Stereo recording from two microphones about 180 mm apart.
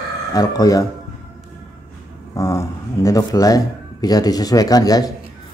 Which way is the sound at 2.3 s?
20° left (ahead or behind).